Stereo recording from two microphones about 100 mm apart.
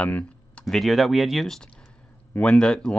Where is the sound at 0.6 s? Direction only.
Centre (ahead or behind).